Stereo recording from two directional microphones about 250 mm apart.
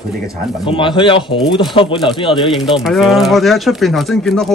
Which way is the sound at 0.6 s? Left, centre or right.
Centre.